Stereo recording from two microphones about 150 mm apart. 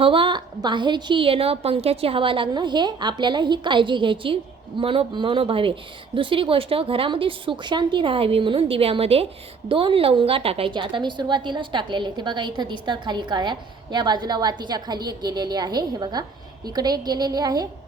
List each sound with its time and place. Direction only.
0.0 s a woman's voice: 35° right (ahead or behind)